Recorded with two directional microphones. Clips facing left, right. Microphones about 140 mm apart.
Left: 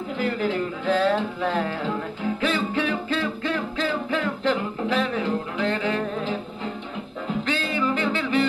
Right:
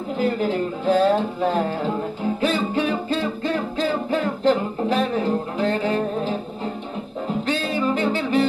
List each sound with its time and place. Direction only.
0.2 s music: 35° right (ahead or behind)
7.4 s music: 40° right (ahead or behind)